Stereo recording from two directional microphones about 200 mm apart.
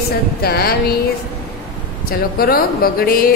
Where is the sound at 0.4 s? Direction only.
50° left (ahead or behind).